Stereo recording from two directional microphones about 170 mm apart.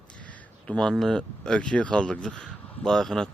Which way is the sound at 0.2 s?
10° left (ahead or behind).